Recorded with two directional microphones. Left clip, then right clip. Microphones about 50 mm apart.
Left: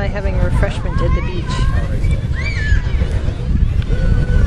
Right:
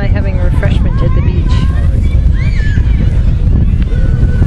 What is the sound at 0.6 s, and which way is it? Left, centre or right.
Vehicle, right.